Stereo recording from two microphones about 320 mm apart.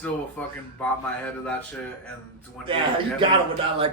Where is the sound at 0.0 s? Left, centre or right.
Centre.